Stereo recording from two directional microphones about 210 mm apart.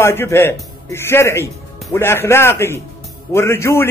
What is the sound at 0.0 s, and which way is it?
A man's voice, 10° left (ahead or behind).